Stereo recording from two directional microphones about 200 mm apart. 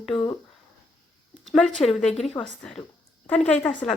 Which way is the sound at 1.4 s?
Centre (ahead or behind).